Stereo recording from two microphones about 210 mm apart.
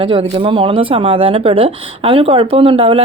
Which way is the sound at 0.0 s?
25° right (ahead or behind).